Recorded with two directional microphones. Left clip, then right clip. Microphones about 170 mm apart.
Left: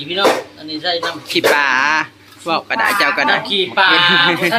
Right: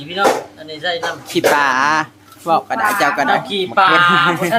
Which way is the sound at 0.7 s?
20° right (ahead or behind).